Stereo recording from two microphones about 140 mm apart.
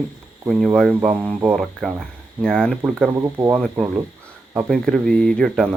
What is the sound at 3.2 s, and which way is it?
Speech, 20° right (ahead or behind).